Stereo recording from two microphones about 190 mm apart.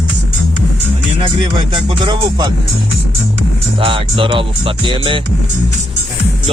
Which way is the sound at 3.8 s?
30° right (ahead or behind).